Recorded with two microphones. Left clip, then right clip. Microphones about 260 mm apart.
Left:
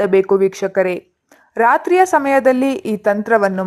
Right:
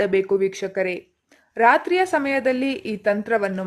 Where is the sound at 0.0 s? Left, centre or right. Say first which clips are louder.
Left 6 dB; centre.